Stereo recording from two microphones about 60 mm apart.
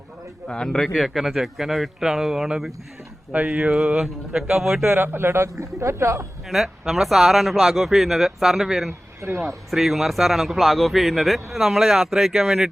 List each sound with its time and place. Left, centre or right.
0.4 s a man's voice: centre
0.9 s a man's voice: centre
3.3 s a man's voice: right; by 4.9 s centre
4.9 s speech: right
6.5 s a man's voice: centre